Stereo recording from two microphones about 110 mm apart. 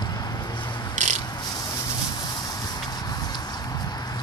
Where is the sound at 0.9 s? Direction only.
90° right.